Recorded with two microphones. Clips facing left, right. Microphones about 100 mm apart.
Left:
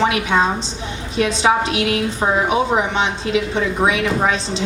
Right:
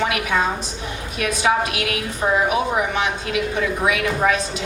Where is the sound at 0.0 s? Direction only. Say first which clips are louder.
Left 4 dB; 25° left (ahead or behind).